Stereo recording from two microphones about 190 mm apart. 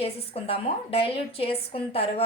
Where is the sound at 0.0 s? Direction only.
30° left (ahead or behind).